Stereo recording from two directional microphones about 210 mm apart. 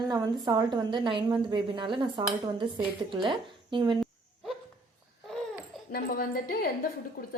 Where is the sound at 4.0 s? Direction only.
Centre (ahead or behind).